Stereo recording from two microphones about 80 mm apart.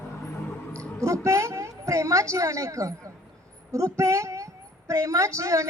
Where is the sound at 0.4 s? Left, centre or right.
Centre.